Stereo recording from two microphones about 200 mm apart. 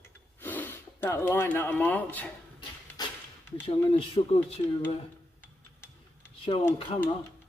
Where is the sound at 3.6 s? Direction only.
30° left (ahead or behind).